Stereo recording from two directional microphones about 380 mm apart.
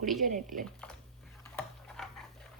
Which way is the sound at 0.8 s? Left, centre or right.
Centre.